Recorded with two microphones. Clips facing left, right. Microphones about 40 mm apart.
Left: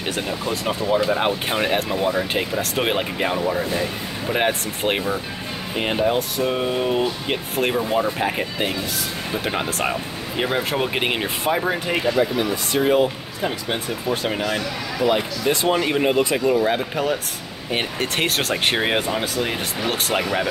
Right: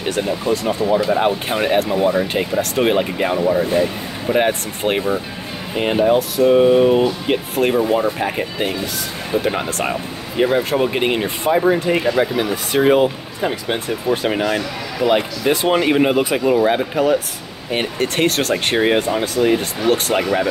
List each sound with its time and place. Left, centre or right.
0.0 s speech: centre
12.2 s speech: right
12.8 s speech: centre